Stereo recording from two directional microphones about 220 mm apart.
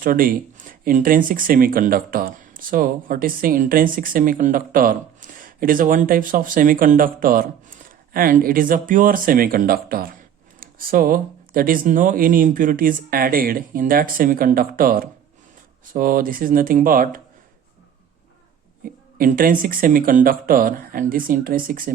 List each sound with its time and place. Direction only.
0.0 s speech: 40° right (ahead or behind)
19.1 s speech: 40° right (ahead or behind)